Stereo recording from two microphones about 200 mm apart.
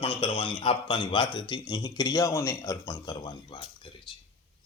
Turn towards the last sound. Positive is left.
turn(degrees=25)  # may be behind; listen again after turning